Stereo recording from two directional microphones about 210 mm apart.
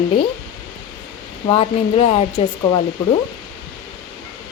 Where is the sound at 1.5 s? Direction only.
30° left (ahead or behind).